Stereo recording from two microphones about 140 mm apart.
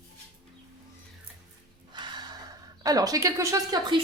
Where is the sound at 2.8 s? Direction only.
25° right (ahead or behind).